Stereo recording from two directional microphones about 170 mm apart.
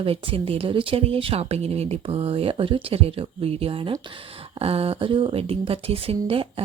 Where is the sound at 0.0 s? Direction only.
35° right (ahead or behind).